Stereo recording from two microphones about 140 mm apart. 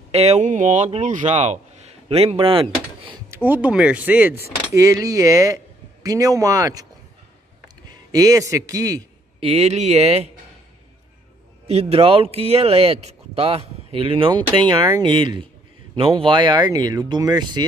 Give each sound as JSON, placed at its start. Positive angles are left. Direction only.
{"t": 0.1, "sound": "speech", "side_deg": -50}
{"t": 3.3, "sound": "speech", "side_deg": -15}
{"t": 4.7, "sound": "a man's voice", "side_deg": -20}
{"t": 9.4, "sound": "speech", "side_deg": -45}
{"t": 11.6, "sound": "speech", "side_deg": -45}